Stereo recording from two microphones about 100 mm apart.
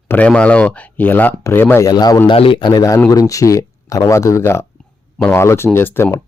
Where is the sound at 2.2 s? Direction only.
65° left (ahead or behind).